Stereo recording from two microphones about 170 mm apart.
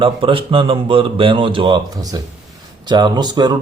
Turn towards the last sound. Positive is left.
turn(degrees=-25)  # may be behind; listen again after turning